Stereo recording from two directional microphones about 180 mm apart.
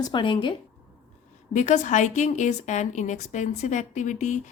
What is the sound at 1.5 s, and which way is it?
A woman's voice, 40° left (ahead or behind).